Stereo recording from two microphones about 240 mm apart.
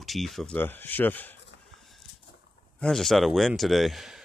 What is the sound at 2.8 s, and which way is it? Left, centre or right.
Speech, centre.